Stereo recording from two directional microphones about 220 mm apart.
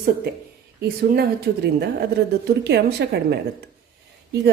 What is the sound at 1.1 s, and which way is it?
A woman's voice, 45° right (ahead or behind).